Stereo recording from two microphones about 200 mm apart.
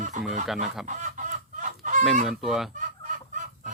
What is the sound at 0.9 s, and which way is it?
Chicken, 40° right (ahead or behind).